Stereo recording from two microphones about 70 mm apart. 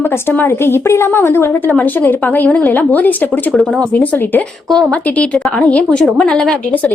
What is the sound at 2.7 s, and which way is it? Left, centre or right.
Speech, left.